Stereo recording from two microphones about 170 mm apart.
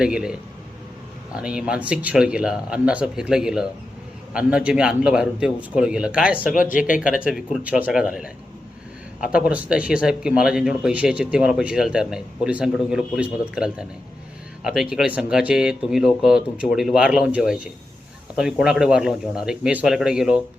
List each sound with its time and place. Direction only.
0.0 s speech: 5° right (ahead or behind)
1.4 s speech: 5° right (ahead or behind)
6.8 s speech: 50° left (ahead or behind)
7.1 s speech: 5° right (ahead or behind)